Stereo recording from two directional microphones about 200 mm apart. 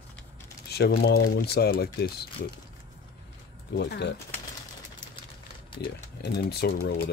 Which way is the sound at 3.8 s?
60° left (ahead or behind).